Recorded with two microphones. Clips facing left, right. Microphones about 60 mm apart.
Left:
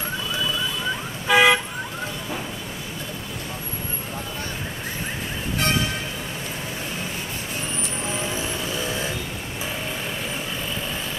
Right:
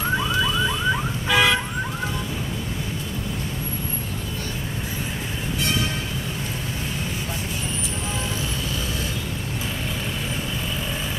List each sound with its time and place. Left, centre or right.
1.3 s vehicle: centre